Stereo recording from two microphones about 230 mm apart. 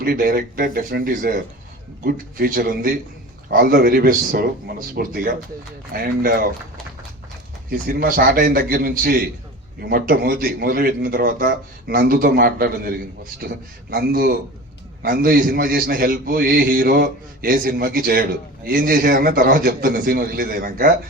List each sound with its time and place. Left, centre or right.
0.0 s a man's voice: right
7.7 s a man's voice: right
13.9 s a man's voice: right